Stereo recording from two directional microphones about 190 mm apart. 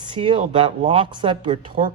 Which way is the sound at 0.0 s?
25° right (ahead or behind).